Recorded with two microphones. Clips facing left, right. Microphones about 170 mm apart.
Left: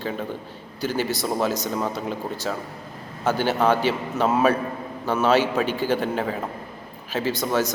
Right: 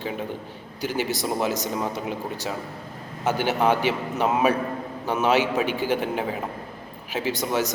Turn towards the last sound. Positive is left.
turn(degrees=-15)  # may be behind; listen again after turning